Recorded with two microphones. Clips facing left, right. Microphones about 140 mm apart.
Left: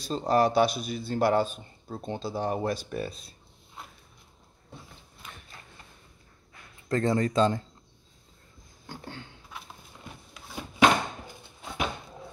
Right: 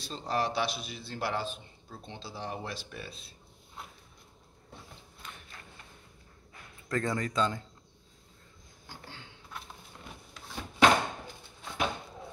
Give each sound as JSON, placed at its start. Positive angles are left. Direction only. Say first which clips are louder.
{"t": 0.0, "sound": "a man's voice", "louder": "left 8 dB", "side_deg": 40}
{"t": 6.9, "sound": "speech", "louder": "left 6 dB", "side_deg": 30}
{"t": 10.3, "sound": "a sound", "louder": "left 2 dB", "side_deg": 10}